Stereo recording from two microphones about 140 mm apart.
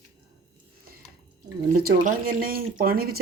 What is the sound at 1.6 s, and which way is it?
Speech, 80° right.